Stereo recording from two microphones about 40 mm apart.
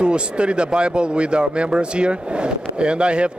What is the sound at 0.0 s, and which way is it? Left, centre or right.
Speech, right.